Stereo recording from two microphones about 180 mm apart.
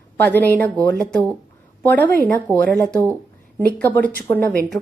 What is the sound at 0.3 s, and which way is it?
A woman's voice, 10° left (ahead or behind).